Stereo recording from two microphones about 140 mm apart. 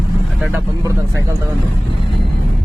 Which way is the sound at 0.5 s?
25° right (ahead or behind).